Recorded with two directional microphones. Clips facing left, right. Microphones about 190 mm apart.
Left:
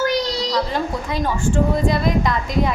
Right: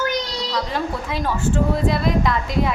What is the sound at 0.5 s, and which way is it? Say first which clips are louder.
Speech: even; centre (ahead or behind).